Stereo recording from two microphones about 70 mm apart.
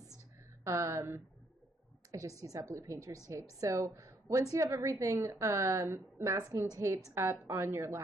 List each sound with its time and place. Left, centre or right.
0.7 s a woman's voice: right
2.0 s a sound: right
2.4 s a woman's voice: right
6.3 s a woman's voice: right
7.2 s a woman's voice: right